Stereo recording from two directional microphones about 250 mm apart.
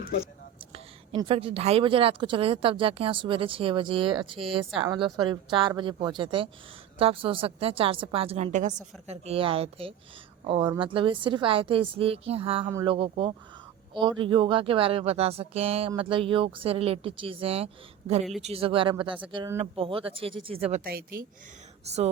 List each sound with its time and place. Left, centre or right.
0.7 s speech: right